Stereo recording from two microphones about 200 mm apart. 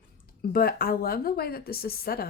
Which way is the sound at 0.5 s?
50° left (ahead or behind).